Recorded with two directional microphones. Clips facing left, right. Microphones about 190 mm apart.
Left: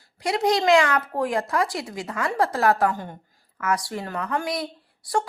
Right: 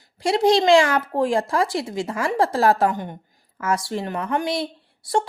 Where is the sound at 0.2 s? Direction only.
30° right (ahead or behind).